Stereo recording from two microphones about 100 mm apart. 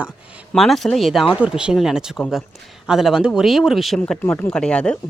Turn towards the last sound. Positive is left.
turn(degrees=10)  # may be behind; listen again after turning